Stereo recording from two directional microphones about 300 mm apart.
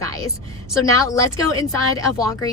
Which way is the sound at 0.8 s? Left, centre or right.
Centre.